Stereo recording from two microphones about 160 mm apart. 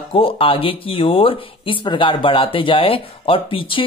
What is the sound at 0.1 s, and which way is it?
Speech, 35° left (ahead or behind).